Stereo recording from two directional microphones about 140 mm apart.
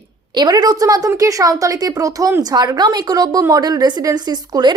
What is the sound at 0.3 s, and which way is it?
A woman's voice, 30° right (ahead or behind).